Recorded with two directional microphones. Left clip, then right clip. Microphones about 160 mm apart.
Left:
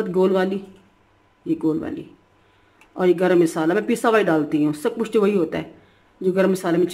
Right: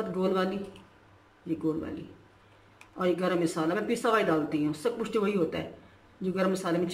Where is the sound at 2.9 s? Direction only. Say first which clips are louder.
Left 10 dB; 65° left (ahead or behind).